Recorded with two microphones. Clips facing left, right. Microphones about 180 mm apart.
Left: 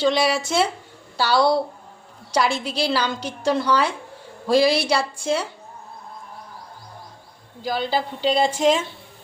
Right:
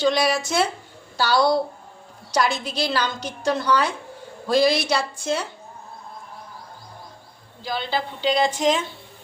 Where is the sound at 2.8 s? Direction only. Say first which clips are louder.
Left 2 dB; 5° left (ahead or behind).